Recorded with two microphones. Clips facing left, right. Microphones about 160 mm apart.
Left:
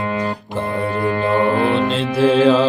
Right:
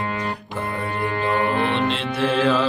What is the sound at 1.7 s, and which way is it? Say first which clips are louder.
Music: left 5 dB; 35° left (ahead or behind).